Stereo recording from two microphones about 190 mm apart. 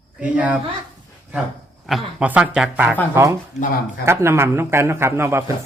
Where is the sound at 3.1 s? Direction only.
15° right (ahead or behind).